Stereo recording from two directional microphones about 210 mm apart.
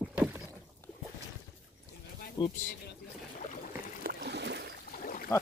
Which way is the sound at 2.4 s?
20° left (ahead or behind).